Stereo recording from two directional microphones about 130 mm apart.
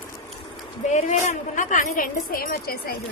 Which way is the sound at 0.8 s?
65° left (ahead or behind).